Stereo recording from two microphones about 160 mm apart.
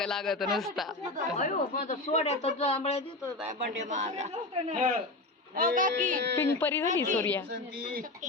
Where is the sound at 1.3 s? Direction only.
50° left (ahead or behind).